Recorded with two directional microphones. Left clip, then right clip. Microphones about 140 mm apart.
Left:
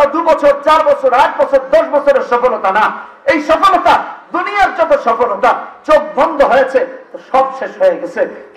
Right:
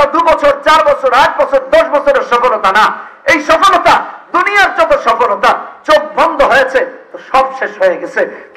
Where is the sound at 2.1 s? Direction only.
30° right (ahead or behind).